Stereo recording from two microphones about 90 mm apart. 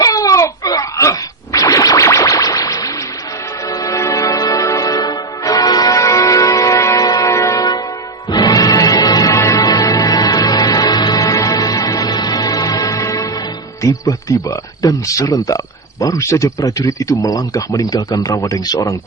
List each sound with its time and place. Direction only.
0.0 s a sound: 40° left (ahead or behind)
1.5 s music: 40° left (ahead or behind)
13.8 s speech: 40° left (ahead or behind)